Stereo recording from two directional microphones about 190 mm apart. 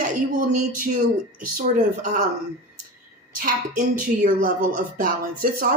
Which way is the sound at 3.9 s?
45° right (ahead or behind).